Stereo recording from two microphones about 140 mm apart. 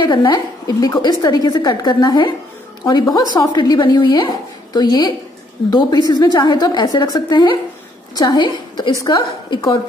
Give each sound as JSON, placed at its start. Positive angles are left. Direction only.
{"t": 0.0, "sound": "a woman's voice", "side_deg": 30}